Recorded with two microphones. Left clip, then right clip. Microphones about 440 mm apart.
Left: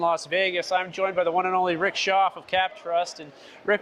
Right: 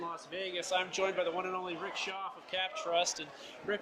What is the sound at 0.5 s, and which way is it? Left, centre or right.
Speech, left.